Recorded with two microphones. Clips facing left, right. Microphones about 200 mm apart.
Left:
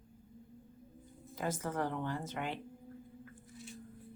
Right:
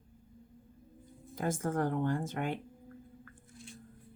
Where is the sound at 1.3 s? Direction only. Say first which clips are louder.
Right 4 dB; 50° right (ahead or behind).